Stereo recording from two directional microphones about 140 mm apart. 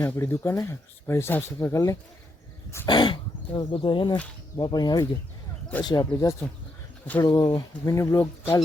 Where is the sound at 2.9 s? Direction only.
35° left (ahead or behind).